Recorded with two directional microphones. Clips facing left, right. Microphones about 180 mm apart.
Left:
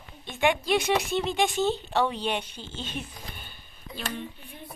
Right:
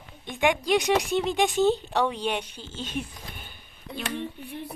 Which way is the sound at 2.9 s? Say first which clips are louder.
Right 4 dB; 15° right (ahead or behind).